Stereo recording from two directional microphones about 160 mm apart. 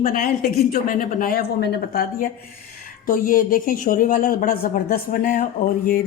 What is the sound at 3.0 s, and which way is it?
A woman's voice, 60° left (ahead or behind).